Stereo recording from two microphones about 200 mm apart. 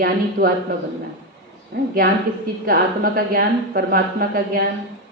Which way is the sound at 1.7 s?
50° right (ahead or behind).